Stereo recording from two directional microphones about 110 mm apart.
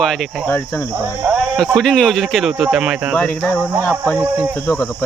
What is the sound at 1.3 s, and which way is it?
Speech, 5° left (ahead or behind).